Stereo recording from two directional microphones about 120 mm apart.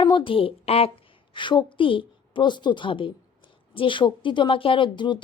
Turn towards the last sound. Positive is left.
turn(degrees=40)  # may be behind; listen again after turning